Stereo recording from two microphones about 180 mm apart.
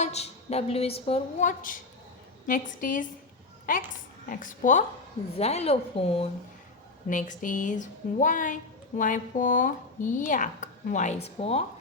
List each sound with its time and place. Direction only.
0.0 s a woman's voice: 35° left (ahead or behind)
4.3 s a woman's voice: 45° left (ahead or behind)
7.1 s a woman's voice: 45° left (ahead or behind)